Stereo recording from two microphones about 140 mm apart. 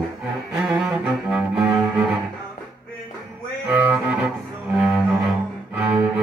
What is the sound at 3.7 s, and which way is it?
Double bass, 10° right (ahead or behind).